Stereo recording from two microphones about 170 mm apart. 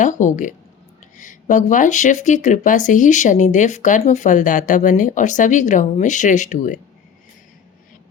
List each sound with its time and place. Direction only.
0.0 s speech: 45° left (ahead or behind)